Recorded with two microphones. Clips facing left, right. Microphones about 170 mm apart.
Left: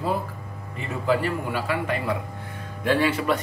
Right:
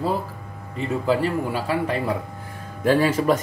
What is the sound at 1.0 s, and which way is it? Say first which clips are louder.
A man's voice: right 1 dB; 35° right (ahead or behind).